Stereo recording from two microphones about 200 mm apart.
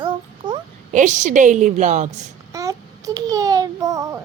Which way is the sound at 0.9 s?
40° right (ahead or behind).